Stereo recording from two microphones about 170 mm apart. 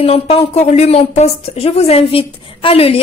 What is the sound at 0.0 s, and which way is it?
A woman's voice, 35° left (ahead or behind).